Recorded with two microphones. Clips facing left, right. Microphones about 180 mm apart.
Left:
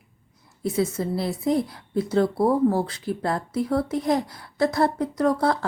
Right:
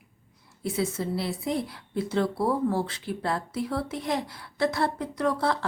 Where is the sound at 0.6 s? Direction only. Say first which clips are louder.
Left 4 dB; 40° left (ahead or behind).